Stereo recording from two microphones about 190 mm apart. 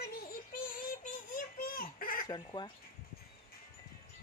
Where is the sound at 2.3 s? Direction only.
25° left (ahead or behind).